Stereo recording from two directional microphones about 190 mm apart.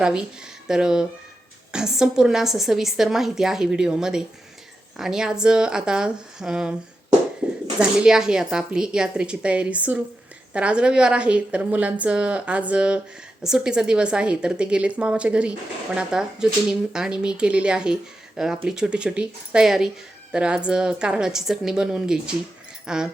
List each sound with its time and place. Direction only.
0.0 s a woman's voice: 5° right (ahead or behind)
7.4 s a sound: 5° right (ahead or behind)
7.8 s a woman's voice: 5° right (ahead or behind)